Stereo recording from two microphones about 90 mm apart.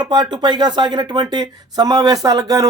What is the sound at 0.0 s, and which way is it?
A man's voice, 55° right (ahead or behind).